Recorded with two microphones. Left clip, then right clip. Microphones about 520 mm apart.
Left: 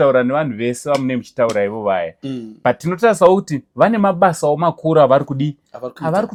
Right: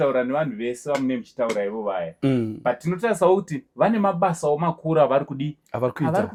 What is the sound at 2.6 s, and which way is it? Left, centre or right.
Speech, left.